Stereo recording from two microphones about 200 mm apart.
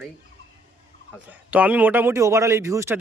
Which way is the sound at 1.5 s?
5° right (ahead or behind).